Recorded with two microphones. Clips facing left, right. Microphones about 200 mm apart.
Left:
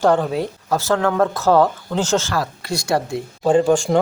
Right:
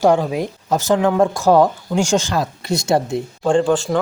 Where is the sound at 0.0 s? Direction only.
10° right (ahead or behind).